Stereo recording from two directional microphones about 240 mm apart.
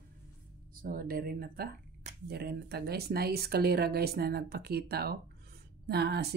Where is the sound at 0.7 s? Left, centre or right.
Right.